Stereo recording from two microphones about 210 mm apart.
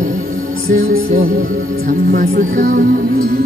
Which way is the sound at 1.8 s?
40° right (ahead or behind).